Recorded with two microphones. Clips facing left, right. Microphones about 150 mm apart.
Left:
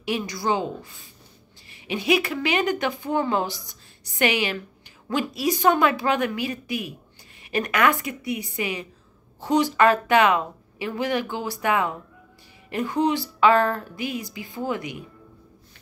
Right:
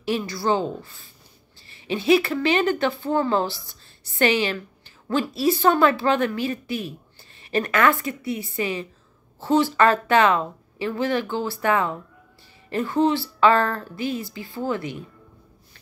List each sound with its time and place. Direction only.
0.0 s speech: 15° left (ahead or behind)